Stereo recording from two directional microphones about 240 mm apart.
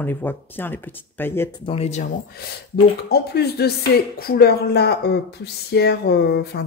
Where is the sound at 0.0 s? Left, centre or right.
Centre.